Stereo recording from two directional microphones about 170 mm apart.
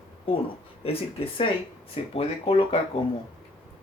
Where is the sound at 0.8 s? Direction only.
35° left (ahead or behind).